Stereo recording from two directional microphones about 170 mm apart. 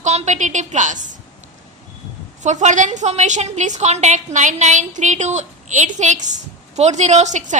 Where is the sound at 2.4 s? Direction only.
45° right (ahead or behind).